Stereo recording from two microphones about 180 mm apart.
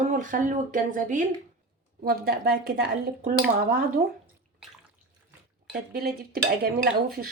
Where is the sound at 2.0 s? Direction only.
60° right (ahead or behind).